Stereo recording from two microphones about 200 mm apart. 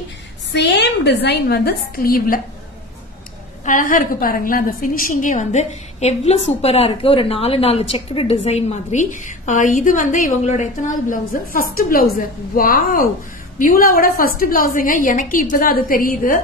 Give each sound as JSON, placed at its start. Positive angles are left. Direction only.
{"t": 0.5, "sound": "a woman's voice", "side_deg": 60}
{"t": 3.6, "sound": "a woman's voice", "side_deg": 40}